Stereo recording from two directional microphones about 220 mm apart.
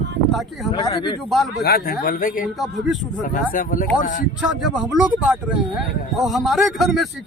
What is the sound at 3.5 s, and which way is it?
Speech, 40° left (ahead or behind).